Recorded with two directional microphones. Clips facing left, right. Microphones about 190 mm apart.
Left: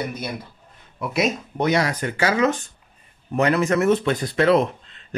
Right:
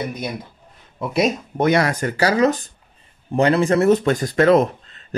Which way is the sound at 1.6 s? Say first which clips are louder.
Right 3 dB; 55° right (ahead or behind).